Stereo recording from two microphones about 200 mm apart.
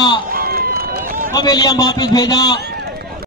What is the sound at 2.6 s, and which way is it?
Run, 55° right (ahead or behind).